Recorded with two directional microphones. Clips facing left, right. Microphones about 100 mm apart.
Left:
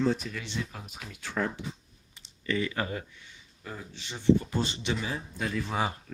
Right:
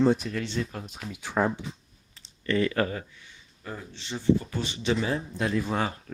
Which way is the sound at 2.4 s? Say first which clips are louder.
Right 5 dB; 10° left (ahead or behind).